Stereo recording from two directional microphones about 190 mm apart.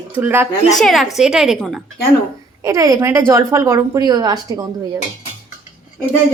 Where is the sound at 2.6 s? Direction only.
15° right (ahead or behind).